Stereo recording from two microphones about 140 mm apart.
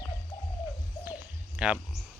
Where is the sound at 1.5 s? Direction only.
10° right (ahead or behind).